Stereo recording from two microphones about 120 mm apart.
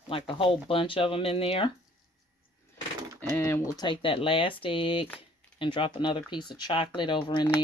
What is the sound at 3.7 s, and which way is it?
Speech, 40° left (ahead or behind).